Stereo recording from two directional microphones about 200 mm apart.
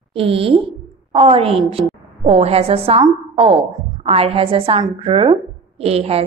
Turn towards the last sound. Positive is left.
turn(degrees=-30)  # may be behind; listen again after turning